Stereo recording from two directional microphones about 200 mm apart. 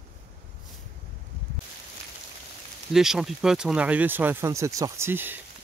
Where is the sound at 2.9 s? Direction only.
Centre (ahead or behind).